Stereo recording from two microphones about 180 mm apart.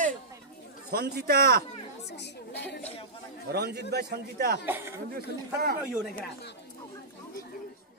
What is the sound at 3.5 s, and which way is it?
A man's voice, 60° right (ahead or behind).